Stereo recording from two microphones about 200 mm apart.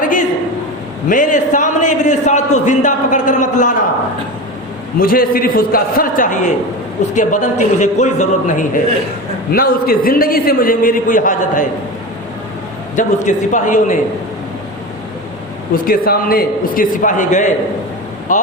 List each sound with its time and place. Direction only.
0.0 s a sound: 40° left (ahead or behind)
1.0 s a man's voice: 40° left (ahead or behind)
4.9 s a man's voice: 45° left (ahead or behind)
13.0 s a man's voice: 40° left (ahead or behind)
15.7 s a man's voice: 45° left (ahead or behind)